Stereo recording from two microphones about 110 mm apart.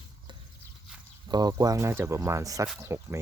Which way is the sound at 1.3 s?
40° right (ahead or behind).